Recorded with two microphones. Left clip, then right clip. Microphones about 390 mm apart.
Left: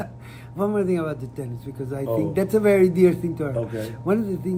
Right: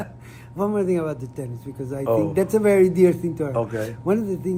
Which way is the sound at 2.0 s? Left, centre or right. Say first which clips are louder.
Right 4 dB; right.